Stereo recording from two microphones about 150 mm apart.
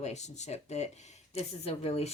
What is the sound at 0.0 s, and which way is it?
Speech, 50° left (ahead or behind).